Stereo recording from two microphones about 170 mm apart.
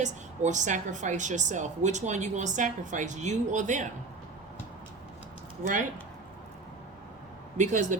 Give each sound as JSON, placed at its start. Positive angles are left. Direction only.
{"t": 0.0, "sound": "a woman's voice", "side_deg": -45}
{"t": 7.5, "sound": "speech", "side_deg": -45}